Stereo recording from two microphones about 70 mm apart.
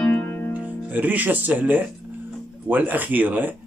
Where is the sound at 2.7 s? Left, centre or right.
Right.